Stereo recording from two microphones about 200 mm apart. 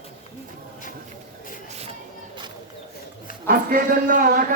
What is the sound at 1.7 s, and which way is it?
Crowd, 30° right (ahead or behind).